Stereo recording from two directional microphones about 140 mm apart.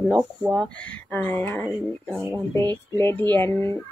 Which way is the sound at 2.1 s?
15° right (ahead or behind).